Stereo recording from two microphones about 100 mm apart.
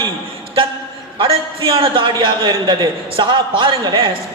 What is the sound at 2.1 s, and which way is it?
A man's voice, 50° right (ahead or behind).